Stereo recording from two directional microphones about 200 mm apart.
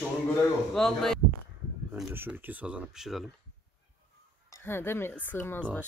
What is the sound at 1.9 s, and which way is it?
A woman's voice, 10° right (ahead or behind).